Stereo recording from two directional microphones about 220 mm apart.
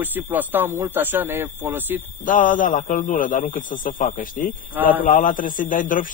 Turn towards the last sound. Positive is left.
turn(degrees=35)  # may be behind; listen again after turning